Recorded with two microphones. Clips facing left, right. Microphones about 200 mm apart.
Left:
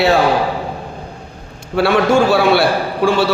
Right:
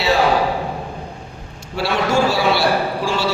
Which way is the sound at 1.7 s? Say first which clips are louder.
Left 6 dB; 55° left (ahead or behind).